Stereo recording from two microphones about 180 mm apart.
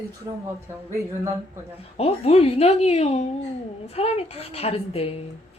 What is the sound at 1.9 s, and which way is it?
A woman's voice, 35° left (ahead or behind).